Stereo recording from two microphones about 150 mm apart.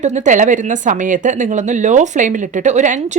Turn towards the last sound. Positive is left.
turn(degrees=-50)  # may be behind; listen again after turning